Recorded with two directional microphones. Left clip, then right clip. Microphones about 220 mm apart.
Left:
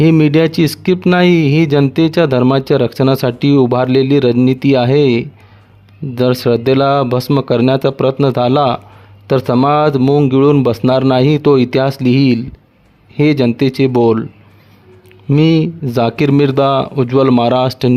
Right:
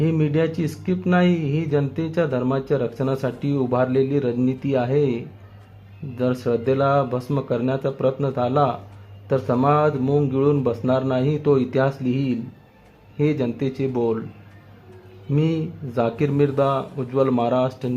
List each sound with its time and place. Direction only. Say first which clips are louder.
0.0 s speech: left 11 dB; 50° left (ahead or behind)
15.3 s speech: left 12 dB; 45° left (ahead or behind)